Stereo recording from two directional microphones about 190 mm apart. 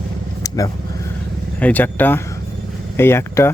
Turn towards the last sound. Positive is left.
turn(degrees=15)  # may be behind; listen again after turning